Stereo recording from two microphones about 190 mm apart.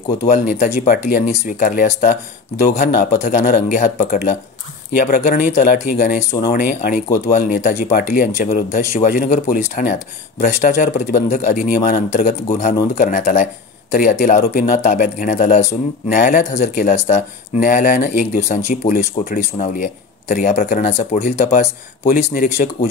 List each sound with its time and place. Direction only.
0.3 s speech: 40° left (ahead or behind)
16.2 s speech: 50° left (ahead or behind)
16.5 s speech: 40° left (ahead or behind)
22.0 s speech: 50° left (ahead or behind)